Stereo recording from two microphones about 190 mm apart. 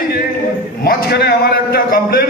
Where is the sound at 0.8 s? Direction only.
55° left (ahead or behind).